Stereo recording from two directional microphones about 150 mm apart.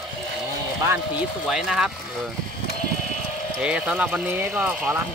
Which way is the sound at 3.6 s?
5° right (ahead or behind).